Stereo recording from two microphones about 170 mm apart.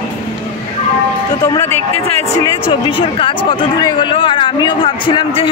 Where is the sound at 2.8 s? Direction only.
30° left (ahead or behind).